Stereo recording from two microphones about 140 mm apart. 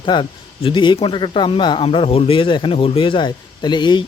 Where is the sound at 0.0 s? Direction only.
35° left (ahead or behind).